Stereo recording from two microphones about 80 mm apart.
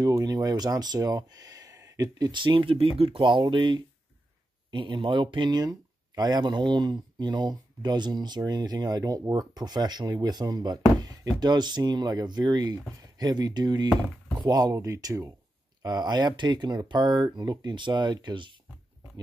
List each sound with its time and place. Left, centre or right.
0.2 s speech: right
15.8 s speech: right